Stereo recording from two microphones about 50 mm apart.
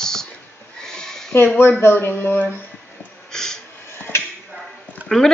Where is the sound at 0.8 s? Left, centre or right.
Centre.